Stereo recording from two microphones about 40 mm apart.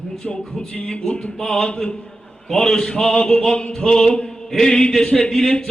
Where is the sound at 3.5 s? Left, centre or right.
Left.